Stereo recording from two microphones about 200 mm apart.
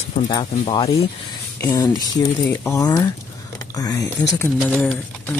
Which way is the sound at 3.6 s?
15° left (ahead or behind).